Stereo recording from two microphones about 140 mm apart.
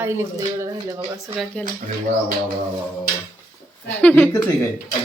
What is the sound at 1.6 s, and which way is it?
Speech, 10° left (ahead or behind).